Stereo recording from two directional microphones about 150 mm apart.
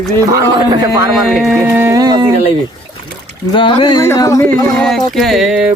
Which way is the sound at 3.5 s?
35° left (ahead or behind).